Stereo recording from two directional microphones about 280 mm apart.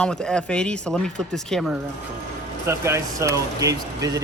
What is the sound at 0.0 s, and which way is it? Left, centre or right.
Speech, centre.